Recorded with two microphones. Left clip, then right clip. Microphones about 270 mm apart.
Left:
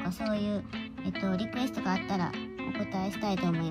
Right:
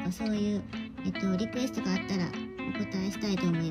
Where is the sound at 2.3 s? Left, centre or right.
Centre.